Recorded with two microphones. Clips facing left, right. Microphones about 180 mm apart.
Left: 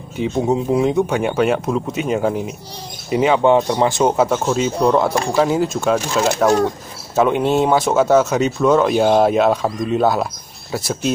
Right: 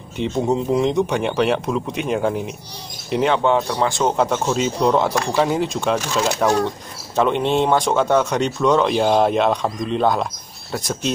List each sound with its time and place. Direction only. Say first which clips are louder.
0.2 s speech: left 2 dB; 5° left (ahead or behind)
3.4 s speech: left 4 dB; 20° left (ahead or behind)
4.2 s speech: left 2 dB; 5° left (ahead or behind)